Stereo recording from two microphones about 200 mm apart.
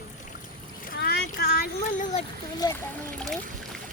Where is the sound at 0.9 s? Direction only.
55° left (ahead or behind); by 2.2 s 40° left (ahead or behind).